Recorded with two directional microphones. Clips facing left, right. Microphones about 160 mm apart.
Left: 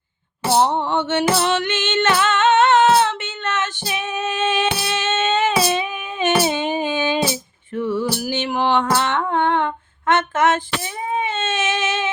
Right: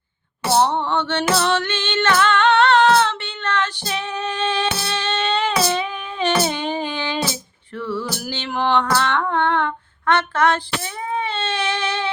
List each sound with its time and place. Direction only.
0.5 s female singing: 15° left (ahead or behind)
3.8 s music: 15° left (ahead or behind)
8.8 s humming: 20° left (ahead or behind)
11.1 s a sound: 20° left (ahead or behind)